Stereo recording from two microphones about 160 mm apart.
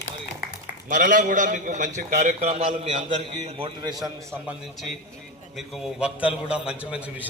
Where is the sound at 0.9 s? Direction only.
55° right (ahead or behind); by 4.1 s 25° right (ahead or behind).